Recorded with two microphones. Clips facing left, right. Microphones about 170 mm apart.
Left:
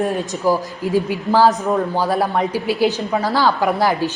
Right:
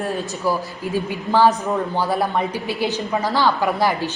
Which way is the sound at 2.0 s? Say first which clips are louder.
Left 2 dB; 10° left (ahead or behind).